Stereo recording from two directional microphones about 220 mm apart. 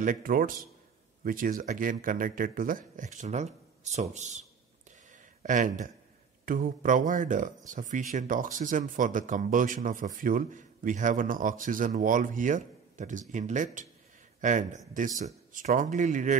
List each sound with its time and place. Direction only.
0.0 s speech: 40° right (ahead or behind)